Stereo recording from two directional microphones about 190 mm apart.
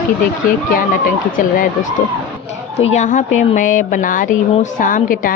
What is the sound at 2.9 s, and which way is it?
A woman's voice, 40° left (ahead or behind).